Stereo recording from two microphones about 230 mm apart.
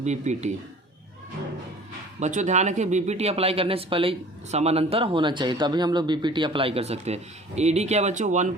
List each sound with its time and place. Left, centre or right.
0.0 s speech: right
2.2 s speech: right